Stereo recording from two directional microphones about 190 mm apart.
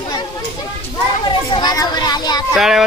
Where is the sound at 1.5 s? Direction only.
20° left (ahead or behind).